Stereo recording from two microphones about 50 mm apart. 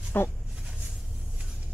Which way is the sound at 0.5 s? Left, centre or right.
Centre.